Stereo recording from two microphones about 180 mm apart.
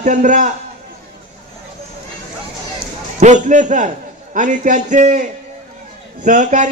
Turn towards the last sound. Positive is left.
turn(degrees=-45)  # may be behind; listen again after turning